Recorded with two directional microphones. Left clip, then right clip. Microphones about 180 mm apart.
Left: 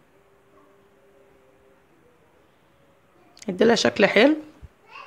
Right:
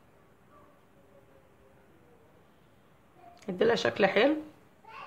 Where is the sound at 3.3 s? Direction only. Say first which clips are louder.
Left 7 dB; 50° left (ahead or behind).